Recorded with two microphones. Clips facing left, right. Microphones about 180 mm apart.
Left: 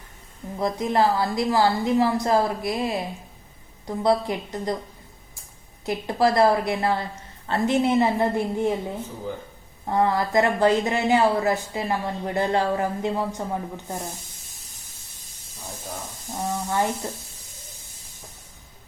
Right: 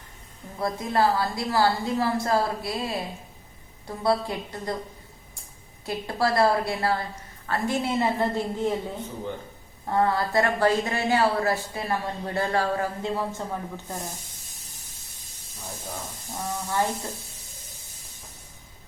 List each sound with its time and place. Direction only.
0.6 s a woman's voice: 20° left (ahead or behind)
5.8 s a woman's voice: 20° left (ahead or behind)
9.8 s a woman's voice: 20° left (ahead or behind)
16.3 s a woman's voice: 20° left (ahead or behind)